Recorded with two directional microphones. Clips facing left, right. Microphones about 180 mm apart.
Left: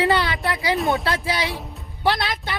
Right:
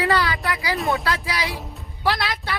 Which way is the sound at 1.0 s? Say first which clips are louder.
Left 2 dB; 30° left (ahead or behind).